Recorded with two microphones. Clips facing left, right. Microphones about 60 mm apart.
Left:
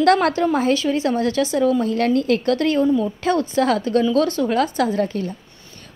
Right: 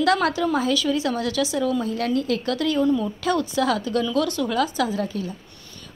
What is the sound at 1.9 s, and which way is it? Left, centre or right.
Speech, left.